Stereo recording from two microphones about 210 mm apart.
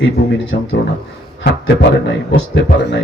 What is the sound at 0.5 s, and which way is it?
Speech, 50° left (ahead or behind).